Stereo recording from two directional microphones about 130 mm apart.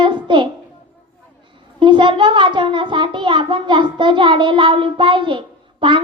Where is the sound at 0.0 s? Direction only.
40° right (ahead or behind).